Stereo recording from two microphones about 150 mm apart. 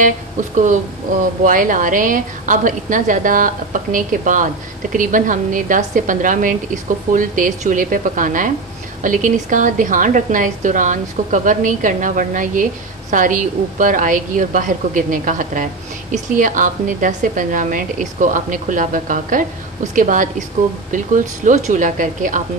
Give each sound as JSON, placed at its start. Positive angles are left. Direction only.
{"t": 0.0, "sound": "a woman's voice", "side_deg": -55}
{"t": 21.5, "sound": "a woman's voice", "side_deg": -60}